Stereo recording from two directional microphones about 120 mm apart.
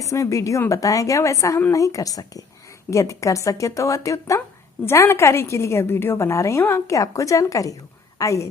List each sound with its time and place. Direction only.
0.0 s a woman's voice: 25° left (ahead or behind)